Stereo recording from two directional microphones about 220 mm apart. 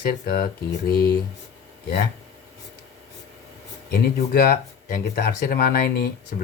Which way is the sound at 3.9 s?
45° left (ahead or behind).